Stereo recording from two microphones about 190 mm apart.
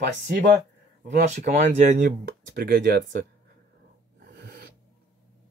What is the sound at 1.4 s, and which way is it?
Speech, 40° right (ahead or behind).